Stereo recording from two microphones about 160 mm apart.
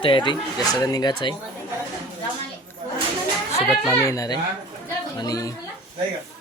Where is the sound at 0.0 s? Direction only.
30° left (ahead or behind).